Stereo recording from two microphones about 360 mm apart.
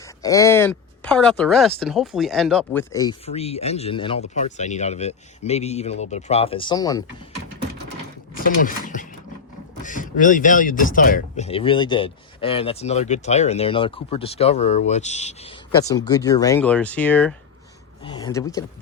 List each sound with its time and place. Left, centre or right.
0.0 s speech: centre
8.4 s speech: left